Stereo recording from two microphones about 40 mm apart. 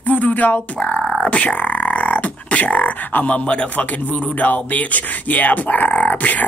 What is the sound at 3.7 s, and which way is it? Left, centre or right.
Speech, left.